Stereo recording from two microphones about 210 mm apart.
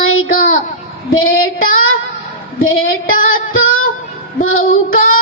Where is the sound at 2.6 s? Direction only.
75° left (ahead or behind).